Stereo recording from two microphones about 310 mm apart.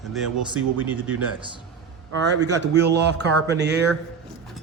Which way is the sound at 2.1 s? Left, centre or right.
Right.